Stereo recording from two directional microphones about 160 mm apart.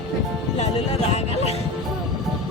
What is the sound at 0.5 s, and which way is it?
Speech, 40° left (ahead or behind).